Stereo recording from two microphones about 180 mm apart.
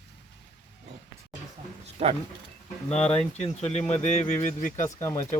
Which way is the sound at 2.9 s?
35° left (ahead or behind).